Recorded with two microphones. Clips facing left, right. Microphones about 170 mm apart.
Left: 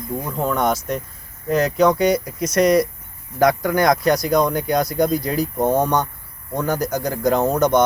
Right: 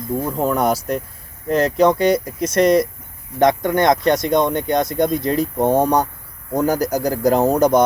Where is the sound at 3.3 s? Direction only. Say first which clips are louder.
Right 1 dB; 25° right (ahead or behind).